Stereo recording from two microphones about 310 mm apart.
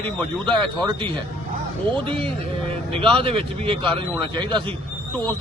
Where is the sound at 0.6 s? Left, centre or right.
Centre.